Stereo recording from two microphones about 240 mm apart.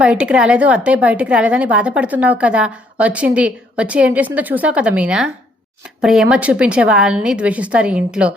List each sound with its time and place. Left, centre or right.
0.0 s a woman's voice: centre